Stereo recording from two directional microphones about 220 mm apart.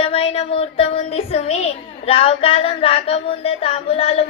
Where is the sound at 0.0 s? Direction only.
25° left (ahead or behind).